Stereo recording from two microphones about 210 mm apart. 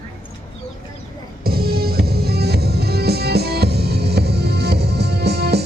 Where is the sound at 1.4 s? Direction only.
45° right (ahead or behind).